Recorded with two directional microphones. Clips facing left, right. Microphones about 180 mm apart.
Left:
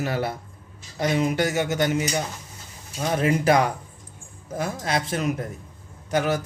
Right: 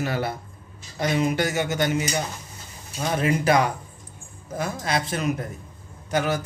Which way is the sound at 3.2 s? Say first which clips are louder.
Left 1 dB; 45° left (ahead or behind).